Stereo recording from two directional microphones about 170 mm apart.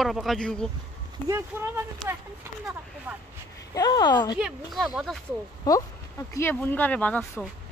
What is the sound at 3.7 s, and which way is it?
Speech, 25° left (ahead or behind).